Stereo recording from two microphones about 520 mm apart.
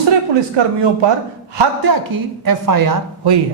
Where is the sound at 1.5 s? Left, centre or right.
Right.